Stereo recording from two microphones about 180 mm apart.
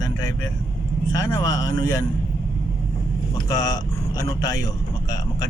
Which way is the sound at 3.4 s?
20° left (ahead or behind).